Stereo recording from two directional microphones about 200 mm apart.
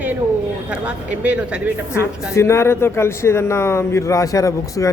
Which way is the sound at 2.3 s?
15° left (ahead or behind).